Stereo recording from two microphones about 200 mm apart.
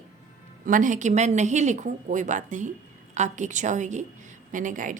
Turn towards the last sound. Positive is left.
turn(degrees=-40)  # may be behind; listen again after turning